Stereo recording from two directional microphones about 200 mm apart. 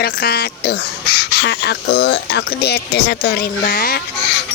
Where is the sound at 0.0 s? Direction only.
50° left (ahead or behind).